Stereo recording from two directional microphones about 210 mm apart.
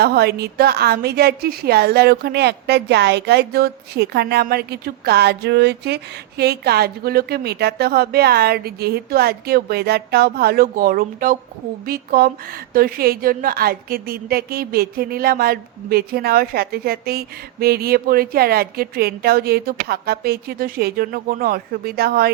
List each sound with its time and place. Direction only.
0.0 s a woman's voice: 50° right (ahead or behind)